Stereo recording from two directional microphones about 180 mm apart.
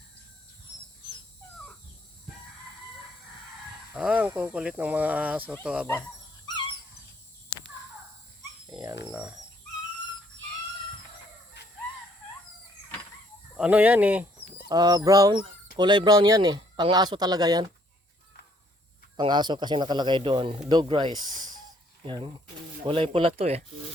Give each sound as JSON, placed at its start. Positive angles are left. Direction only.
{"t": 3.9, "sound": "speech", "side_deg": -5}
{"t": 8.8, "sound": "a sound", "side_deg": -20}
{"t": 11.6, "sound": "caw", "side_deg": 75}
{"t": 13.6, "sound": "speech", "side_deg": -5}
{"t": 14.7, "sound": "speech", "side_deg": -20}
{"t": 19.1, "sound": "speech", "side_deg": -25}